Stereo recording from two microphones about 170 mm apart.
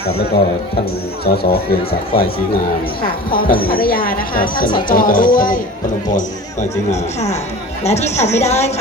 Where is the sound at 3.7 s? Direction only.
60° left (ahead or behind).